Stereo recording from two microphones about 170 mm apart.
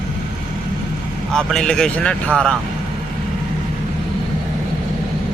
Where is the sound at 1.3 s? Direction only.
5° left (ahead or behind).